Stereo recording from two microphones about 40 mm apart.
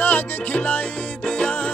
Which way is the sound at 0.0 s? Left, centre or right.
Left.